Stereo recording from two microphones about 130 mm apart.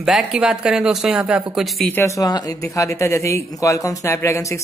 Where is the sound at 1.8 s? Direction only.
20° left (ahead or behind).